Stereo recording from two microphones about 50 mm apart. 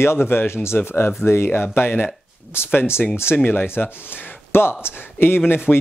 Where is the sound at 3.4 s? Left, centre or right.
Left.